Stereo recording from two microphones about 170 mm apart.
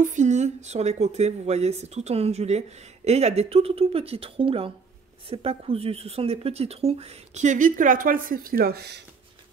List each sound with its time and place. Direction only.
0.0 s speech: 45° right (ahead or behind); by 9.0 s 70° right (ahead or behind)